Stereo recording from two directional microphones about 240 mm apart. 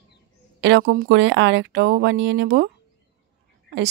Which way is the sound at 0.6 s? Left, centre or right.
Right.